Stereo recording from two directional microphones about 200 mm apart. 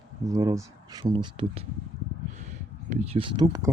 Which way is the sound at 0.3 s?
15° right (ahead or behind).